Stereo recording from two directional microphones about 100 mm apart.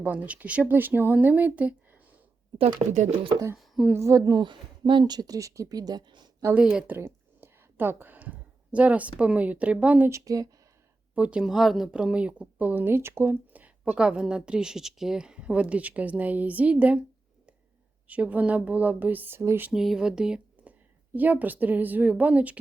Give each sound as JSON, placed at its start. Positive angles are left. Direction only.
{"t": 0.0, "sound": "a woman's voice", "side_deg": -15}
{"t": 2.8, "sound": "speech", "side_deg": -45}
{"t": 3.9, "sound": "speech", "side_deg": -35}
{"t": 6.5, "sound": "a woman's voice", "side_deg": -10}
{"t": 6.9, "sound": "speech", "side_deg": -25}
{"t": 10.1, "sound": "speech", "side_deg": -35}
{"t": 11.1, "sound": "a woman's voice", "side_deg": -10}
{"t": 18.1, "sound": "a woman's voice", "side_deg": -15}
{"t": 19.7, "sound": "a woman's voice", "side_deg": -5}